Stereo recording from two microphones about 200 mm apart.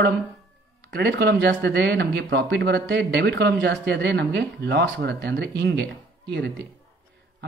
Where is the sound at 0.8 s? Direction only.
55° right (ahead or behind).